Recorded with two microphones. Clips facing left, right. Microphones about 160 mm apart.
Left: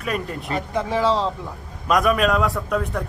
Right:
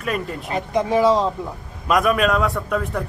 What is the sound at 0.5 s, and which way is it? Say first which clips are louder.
Speech: right 4 dB; 15° right (ahead or behind).